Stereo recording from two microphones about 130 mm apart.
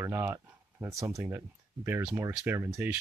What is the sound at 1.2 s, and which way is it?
Speech, 20° right (ahead or behind).